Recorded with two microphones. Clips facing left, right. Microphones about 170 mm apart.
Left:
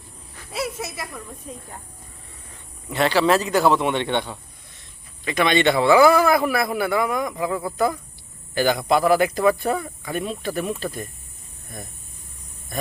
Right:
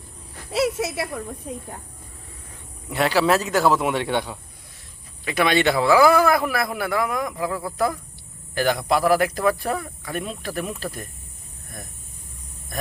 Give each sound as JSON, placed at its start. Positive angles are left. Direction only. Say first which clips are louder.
{"t": 0.5, "sound": "speech", "louder": "right 6 dB", "side_deg": -80}
{"t": 1.5, "sound": "speech", "louder": "right 3 dB", "side_deg": -60}
{"t": 2.9, "sound": "a man's voice", "louder": "left 1 dB", "side_deg": -10}
{"t": 12.7, "sound": "a man's voice", "louder": "left 2 dB", "side_deg": 0}